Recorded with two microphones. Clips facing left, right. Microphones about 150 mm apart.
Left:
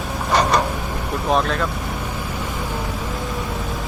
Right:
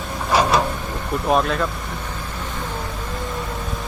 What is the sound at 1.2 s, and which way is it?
Speech, centre (ahead or behind).